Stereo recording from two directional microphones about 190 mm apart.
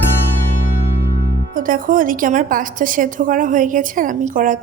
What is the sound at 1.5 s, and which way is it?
A woman's voice, 45° right (ahead or behind).